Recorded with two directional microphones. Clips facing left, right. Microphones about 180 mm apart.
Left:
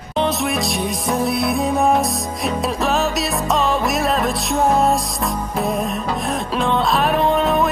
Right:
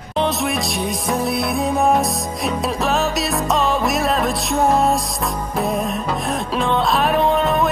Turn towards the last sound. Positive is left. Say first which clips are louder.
# even
turn(degrees=0)  # may be behind; listen again after turning